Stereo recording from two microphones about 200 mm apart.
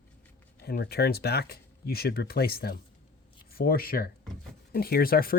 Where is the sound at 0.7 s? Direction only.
50° left (ahead or behind).